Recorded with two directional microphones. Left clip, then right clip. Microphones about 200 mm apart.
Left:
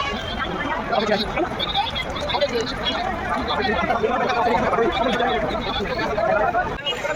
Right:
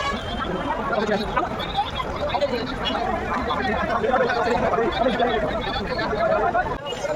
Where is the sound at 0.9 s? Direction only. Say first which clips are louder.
Left 4 dB; 5° right (ahead or behind).